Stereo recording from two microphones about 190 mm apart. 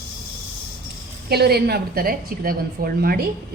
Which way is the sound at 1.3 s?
55° right (ahead or behind).